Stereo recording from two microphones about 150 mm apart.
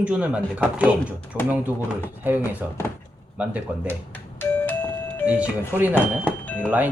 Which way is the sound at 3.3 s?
10° right (ahead or behind).